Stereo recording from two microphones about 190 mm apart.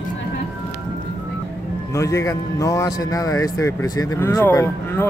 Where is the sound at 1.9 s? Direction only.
15° left (ahead or behind).